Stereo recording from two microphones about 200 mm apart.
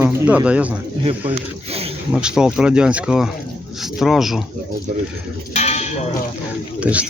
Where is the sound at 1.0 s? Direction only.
25° right (ahead or behind).